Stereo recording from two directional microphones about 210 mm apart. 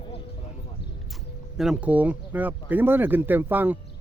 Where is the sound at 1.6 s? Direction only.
5° right (ahead or behind).